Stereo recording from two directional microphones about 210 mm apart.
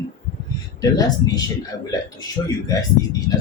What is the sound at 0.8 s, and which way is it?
Speech, 15° left (ahead or behind).